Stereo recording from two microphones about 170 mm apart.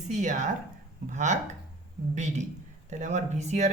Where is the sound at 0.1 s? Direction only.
45° right (ahead or behind).